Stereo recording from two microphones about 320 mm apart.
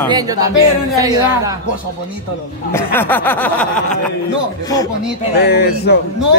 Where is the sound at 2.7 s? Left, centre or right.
Centre.